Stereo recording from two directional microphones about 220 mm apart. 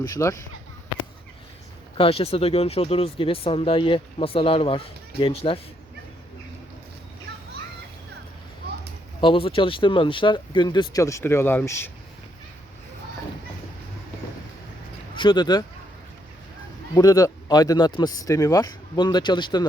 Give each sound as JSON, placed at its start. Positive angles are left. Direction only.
{"t": 0.0, "sound": "speech", "side_deg": 15}
{"t": 2.0, "sound": "speech", "side_deg": 25}
{"t": 9.2, "sound": "speech", "side_deg": 25}
{"t": 15.1, "sound": "speech", "side_deg": 20}
{"t": 16.9, "sound": "speech", "side_deg": 15}